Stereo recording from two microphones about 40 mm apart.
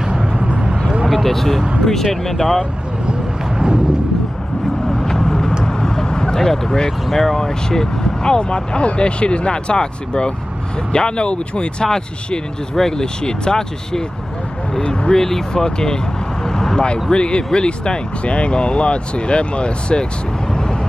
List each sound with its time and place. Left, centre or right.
0.0 s vehicle: right
1.0 s a sound: centre
1.9 s speech: centre
3.1 s a sound: right
5.0 s vehicle: centre
5.7 s speech: centre
16.4 s vehicle: centre
16.8 s speech: left